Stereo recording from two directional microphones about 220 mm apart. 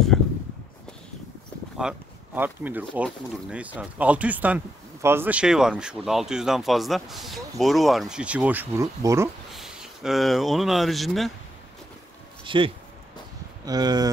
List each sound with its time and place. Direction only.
1.8 s speech: 5° right (ahead or behind)
9.5 s speech: centre (ahead or behind)
12.4 s speech: 25° right (ahead or behind)